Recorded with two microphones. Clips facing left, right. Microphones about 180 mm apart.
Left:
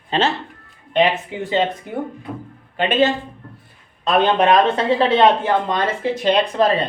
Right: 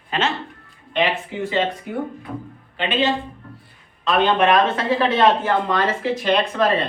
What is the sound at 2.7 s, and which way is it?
A man's voice, 45° left (ahead or behind).